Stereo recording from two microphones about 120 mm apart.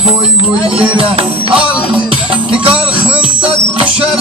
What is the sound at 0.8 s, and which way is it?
Music, 50° right (ahead or behind).